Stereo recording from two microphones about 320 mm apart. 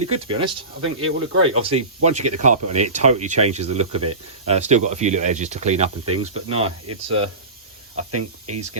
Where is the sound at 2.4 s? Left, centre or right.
Right.